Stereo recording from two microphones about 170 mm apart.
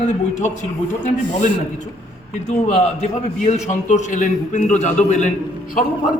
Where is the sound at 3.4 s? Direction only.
45° left (ahead or behind).